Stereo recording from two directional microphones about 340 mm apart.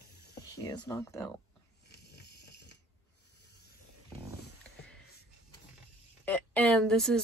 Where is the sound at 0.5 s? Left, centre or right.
Centre.